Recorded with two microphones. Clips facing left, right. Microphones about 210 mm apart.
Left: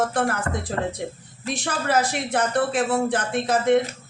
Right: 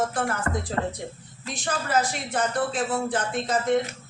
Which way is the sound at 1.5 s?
65° left (ahead or behind).